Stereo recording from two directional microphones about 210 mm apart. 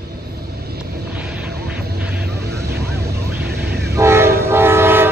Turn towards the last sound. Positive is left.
turn(degrees=-10)  # may be behind; listen again after turning